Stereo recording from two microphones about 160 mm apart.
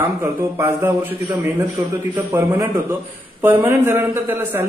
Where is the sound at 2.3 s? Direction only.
15° right (ahead or behind).